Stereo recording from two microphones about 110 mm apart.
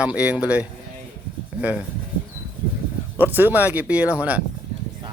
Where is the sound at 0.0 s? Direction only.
10° right (ahead or behind).